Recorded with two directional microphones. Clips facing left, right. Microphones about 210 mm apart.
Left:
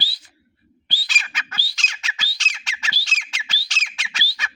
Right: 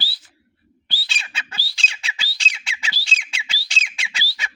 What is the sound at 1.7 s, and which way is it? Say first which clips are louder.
Squawk: right 1 dB; 30° right (ahead or behind).